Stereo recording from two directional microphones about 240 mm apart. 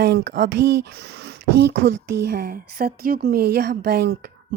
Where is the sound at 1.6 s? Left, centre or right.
Right.